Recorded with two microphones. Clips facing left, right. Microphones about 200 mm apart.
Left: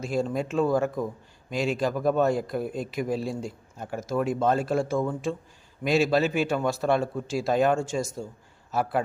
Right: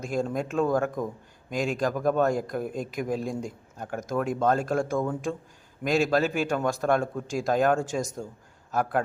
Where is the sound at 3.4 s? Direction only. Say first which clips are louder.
Even; 5° left (ahead or behind).